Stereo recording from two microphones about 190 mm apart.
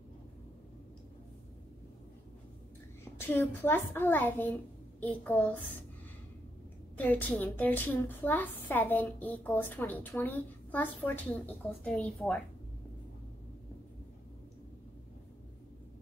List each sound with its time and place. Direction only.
3.2 s a woman's voice: 10° left (ahead or behind)
7.0 s a woman's voice: 10° left (ahead or behind)